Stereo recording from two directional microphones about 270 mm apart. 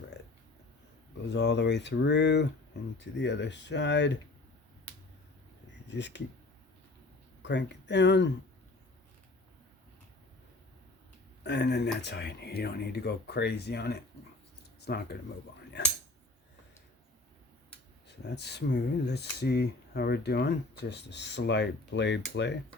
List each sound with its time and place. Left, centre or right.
1.3 s speech: left
5.9 s speech: left
7.4 s speech: left
11.4 s speech: left
18.2 s speech: left